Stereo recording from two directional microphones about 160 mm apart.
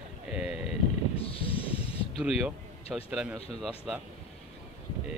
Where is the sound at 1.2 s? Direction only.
35° left (ahead or behind).